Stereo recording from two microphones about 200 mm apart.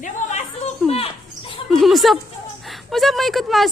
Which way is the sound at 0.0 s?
35° left (ahead or behind).